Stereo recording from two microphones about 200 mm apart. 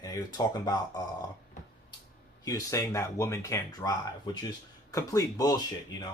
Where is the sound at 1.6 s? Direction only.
40° left (ahead or behind).